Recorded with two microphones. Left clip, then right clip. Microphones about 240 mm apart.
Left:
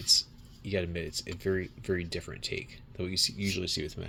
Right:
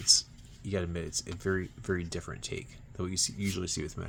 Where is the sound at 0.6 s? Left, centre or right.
Centre.